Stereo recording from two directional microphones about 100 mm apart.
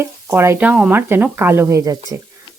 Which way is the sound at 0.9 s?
20° right (ahead or behind).